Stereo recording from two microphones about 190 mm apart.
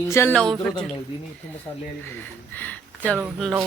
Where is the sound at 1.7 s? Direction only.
25° left (ahead or behind).